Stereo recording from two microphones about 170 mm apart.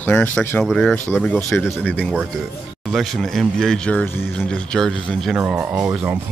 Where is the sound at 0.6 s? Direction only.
5° right (ahead or behind).